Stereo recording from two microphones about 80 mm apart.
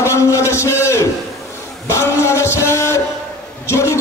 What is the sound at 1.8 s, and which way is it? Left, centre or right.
Music, left.